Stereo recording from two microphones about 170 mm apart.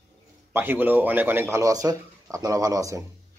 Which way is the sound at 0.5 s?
10° right (ahead or behind).